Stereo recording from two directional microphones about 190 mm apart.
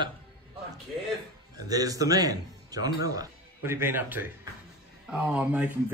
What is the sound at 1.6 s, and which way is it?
Speech, 20° right (ahead or behind).